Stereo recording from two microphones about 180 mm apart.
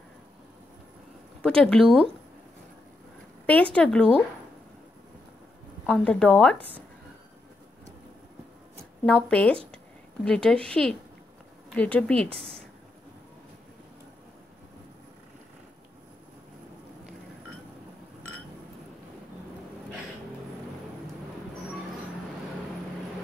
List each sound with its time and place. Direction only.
1.4 s a woman's voice: 5° left (ahead or behind)
3.4 s a woman's voice: 5° left (ahead or behind)
5.9 s a woman's voice: 5° left (ahead or behind)
9.0 s a woman's voice: 5° left (ahead or behind)
12.3 s a woman's voice: 30° right (ahead or behind)